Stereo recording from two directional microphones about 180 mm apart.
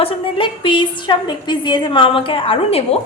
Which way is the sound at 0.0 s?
30° left (ahead or behind).